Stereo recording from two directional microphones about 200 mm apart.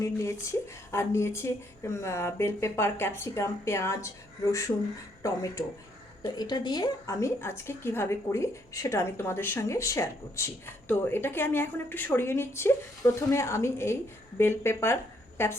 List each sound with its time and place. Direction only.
0.0 s a woman's voice: 15° left (ahead or behind)